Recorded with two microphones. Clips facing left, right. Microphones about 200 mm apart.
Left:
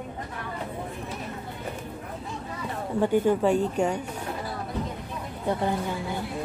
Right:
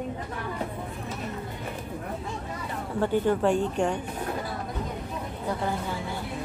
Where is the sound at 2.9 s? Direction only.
15° left (ahead or behind).